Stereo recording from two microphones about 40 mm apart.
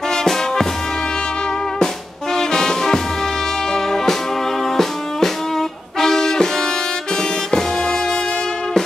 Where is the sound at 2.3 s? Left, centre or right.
Centre.